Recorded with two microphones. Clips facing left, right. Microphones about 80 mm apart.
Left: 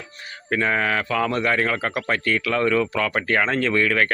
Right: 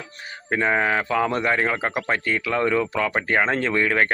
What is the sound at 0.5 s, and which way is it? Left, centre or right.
Speech, centre.